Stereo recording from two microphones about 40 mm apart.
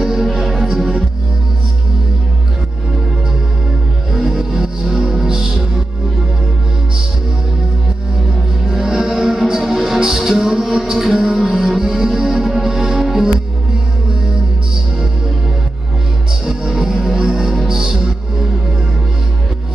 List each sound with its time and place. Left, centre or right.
0.0 s music: centre
4.1 s music: centre
8.6 s music: centre
16.4 s music: centre